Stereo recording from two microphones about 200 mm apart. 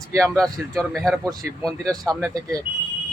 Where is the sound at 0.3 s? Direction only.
Centre (ahead or behind).